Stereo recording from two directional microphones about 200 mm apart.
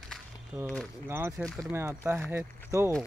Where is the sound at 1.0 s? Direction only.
10° right (ahead or behind).